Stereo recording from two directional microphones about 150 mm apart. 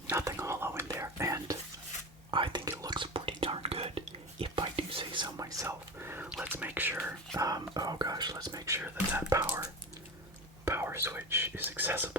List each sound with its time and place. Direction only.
0.1 s whispering: 20° right (ahead or behind)
2.3 s whispering: 35° right (ahead or behind)
2.6 s whispering: 15° right (ahead or behind)
2.9 s whispering: 35° right (ahead or behind); by 9.6 s 20° right (ahead or behind)
10.7 s whispering: 15° right (ahead or behind)